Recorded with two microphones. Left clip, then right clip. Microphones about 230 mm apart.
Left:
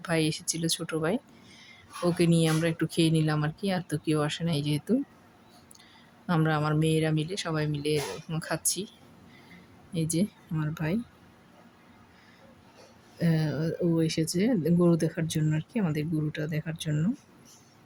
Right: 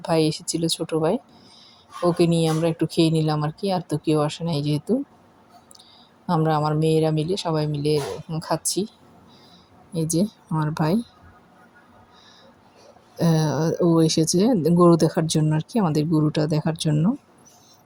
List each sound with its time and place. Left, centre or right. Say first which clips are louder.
0.0 s speech: right 7 dB; centre
6.7 s speech: right 7 dB; centre
9.9 s speech: right 7 dB; centre
13.1 s speech: right 8 dB; centre